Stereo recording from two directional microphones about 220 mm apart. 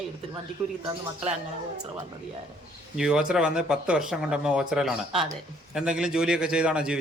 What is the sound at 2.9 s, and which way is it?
Speech, 5° right (ahead or behind).